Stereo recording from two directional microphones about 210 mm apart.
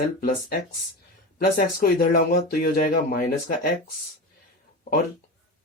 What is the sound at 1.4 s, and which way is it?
Speech, 45° left (ahead or behind).